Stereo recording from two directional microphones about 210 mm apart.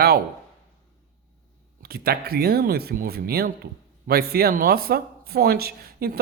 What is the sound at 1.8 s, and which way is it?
Speech, 45° right (ahead or behind).